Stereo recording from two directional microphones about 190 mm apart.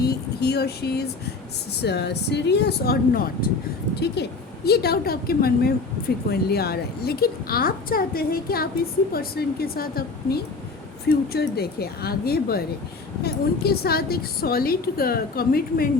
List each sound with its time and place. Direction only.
0.0 s a woman's voice: 55° left (ahead or behind)